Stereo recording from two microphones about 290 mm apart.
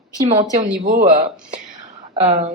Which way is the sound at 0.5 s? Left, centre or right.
Right.